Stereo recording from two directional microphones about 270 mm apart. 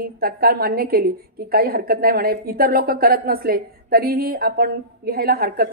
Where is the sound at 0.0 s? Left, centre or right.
Right.